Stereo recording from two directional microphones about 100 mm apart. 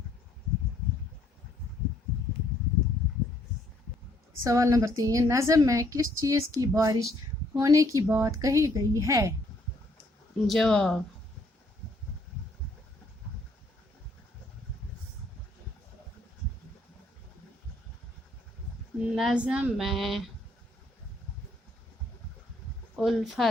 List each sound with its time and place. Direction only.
4.4 s a woman's voice: 35° right (ahead or behind)
10.4 s speech: 5° left (ahead or behind)
19.1 s speech: 10° right (ahead or behind)
19.8 s speech: centre (ahead or behind)
23.0 s speech: centre (ahead or behind)